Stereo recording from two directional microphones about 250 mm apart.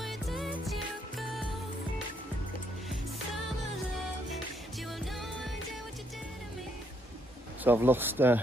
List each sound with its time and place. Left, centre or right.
0.0 s music: centre
4.9 s music: centre
7.6 s speech: centre